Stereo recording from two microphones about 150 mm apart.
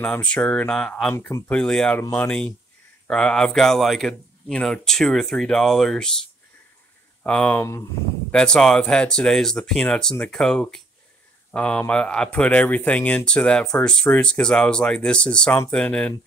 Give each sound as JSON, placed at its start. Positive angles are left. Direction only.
{"t": 0.0, "sound": "speech", "side_deg": 5}
{"t": 1.1, "sound": "speech", "side_deg": 20}
{"t": 1.5, "sound": "speech", "side_deg": 5}
{"t": 7.2, "sound": "speech", "side_deg": 10}